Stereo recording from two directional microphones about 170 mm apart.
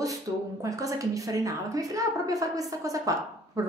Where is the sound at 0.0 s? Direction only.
20° right (ahead or behind).